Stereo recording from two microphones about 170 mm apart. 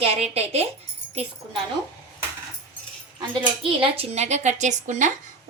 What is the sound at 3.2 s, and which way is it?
A woman's voice, 30° right (ahead or behind).